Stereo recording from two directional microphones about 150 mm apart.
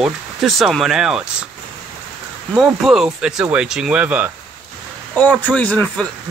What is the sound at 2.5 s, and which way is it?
Speech, 5° right (ahead or behind).